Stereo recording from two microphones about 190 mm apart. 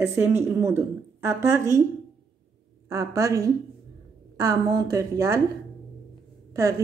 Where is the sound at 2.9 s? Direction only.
15° right (ahead or behind).